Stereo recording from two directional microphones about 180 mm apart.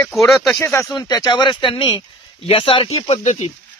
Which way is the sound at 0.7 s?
15° left (ahead or behind).